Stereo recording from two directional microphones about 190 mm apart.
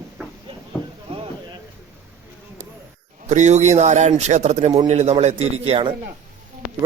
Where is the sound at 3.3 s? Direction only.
40° right (ahead or behind).